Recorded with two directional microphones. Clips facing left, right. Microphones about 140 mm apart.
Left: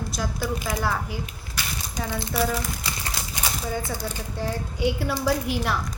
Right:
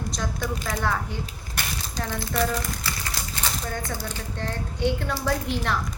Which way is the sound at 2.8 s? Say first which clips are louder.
Even; 20° left (ahead or behind).